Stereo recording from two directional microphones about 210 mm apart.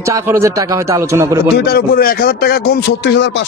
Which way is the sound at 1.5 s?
45° left (ahead or behind).